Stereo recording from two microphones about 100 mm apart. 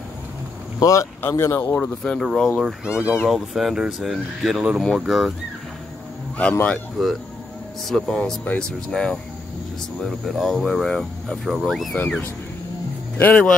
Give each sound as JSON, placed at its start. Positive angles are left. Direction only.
{"t": 0.7, "sound": "speech", "side_deg": 35}
{"t": 2.0, "sound": "speech", "side_deg": 5}
{"t": 2.6, "sound": "speech", "side_deg": -10}
{"t": 7.0, "sound": "speech", "side_deg": 0}
{"t": 13.2, "sound": "speech", "side_deg": 15}